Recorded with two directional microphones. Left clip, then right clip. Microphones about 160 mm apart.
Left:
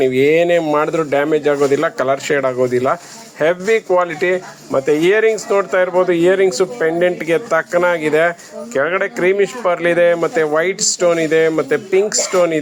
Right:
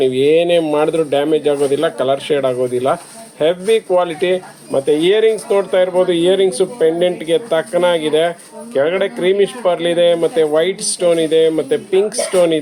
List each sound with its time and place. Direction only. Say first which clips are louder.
0.1 s speech: even; 45° left (ahead or behind)
0.3 s a man's voice: even; centre (ahead or behind)